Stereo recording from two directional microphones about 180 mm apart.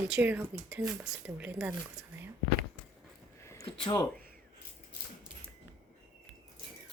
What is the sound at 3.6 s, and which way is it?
Speech, 25° left (ahead or behind).